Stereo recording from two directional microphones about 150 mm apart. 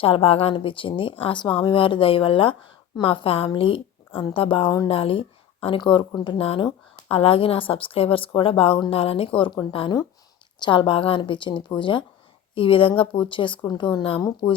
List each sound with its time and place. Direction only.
0.0 s speech: 40° left (ahead or behind)